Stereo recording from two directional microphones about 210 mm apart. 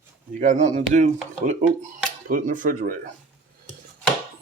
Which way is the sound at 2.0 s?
40° right (ahead or behind).